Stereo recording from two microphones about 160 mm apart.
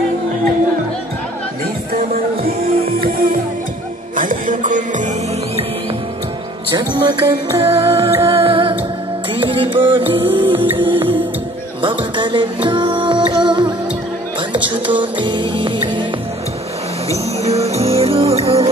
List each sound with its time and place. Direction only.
2.4 s music: 65° right (ahead or behind)
6.7 s music: 25° right (ahead or behind)
17.1 s music: 40° right (ahead or behind)